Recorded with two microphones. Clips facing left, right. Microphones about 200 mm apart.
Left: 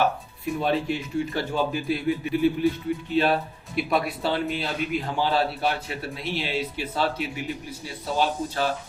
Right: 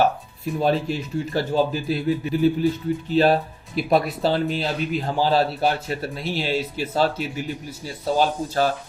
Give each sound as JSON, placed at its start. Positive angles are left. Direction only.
{"t": 0.6, "sound": "speech", "side_deg": -40}